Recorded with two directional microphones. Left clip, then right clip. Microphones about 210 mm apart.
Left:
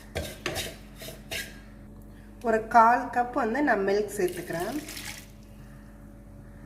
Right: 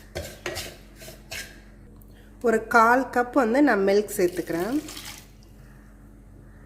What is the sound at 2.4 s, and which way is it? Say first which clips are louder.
Speech: right 1 dB; 45° right (ahead or behind).